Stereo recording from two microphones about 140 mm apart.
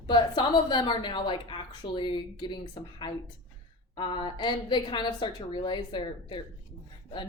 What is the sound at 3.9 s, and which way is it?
Speech, 35° left (ahead or behind).